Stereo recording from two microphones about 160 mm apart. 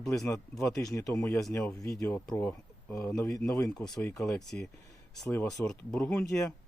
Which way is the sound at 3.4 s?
5° left (ahead or behind).